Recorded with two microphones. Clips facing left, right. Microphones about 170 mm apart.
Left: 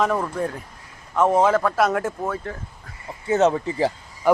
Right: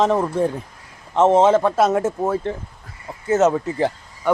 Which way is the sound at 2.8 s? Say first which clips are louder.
Right 2 dB; centre (ahead or behind).